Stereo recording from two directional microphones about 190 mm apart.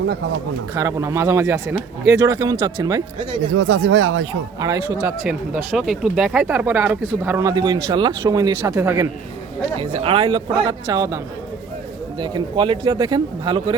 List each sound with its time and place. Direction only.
0.8 s speech: 15° right (ahead or behind)
3.5 s speech: 75° right (ahead or behind)
4.6 s speech: 20° right (ahead or behind)
4.9 s speech: 10° right (ahead or behind)
9.8 s speech: 30° right (ahead or behind)
12.2 s speech: 25° right (ahead or behind)